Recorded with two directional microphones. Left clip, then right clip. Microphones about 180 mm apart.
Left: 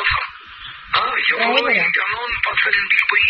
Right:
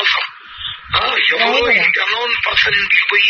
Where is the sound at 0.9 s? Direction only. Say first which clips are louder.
Right 3 dB; 40° right (ahead or behind).